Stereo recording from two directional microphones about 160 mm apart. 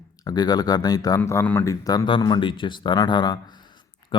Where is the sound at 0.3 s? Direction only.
25° left (ahead or behind).